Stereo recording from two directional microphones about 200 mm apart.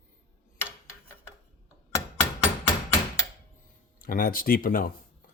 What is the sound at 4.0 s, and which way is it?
Speech, 45° left (ahead or behind).